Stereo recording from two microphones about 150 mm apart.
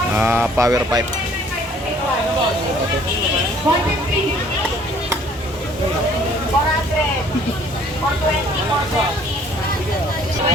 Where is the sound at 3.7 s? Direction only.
25° right (ahead or behind).